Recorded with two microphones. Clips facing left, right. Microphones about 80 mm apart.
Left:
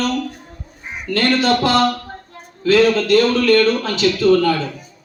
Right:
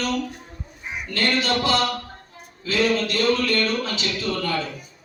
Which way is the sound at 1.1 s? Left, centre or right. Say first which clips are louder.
Left 7 dB; left.